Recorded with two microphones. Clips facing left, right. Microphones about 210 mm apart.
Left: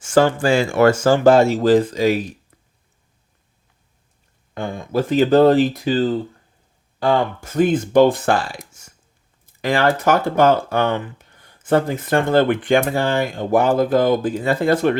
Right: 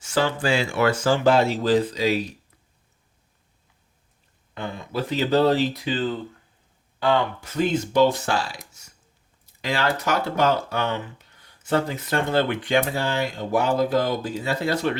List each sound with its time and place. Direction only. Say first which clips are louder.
0.0 s speech: left 8 dB; 50° left (ahead or behind)
4.5 s speech: left 7 dB; 45° left (ahead or behind)